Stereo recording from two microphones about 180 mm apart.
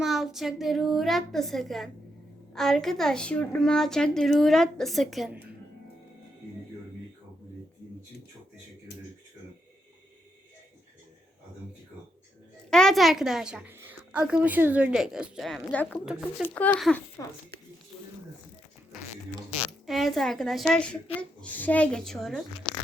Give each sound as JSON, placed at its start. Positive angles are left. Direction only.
{"t": 0.0, "sound": "a woman's voice", "side_deg": 0}
{"t": 12.7, "sound": "a woman's voice", "side_deg": 0}
{"t": 16.0, "sound": "a woman's voice", "side_deg": -5}
{"t": 16.7, "sound": "speech", "side_deg": 10}
{"t": 19.9, "sound": "a woman's voice", "side_deg": 0}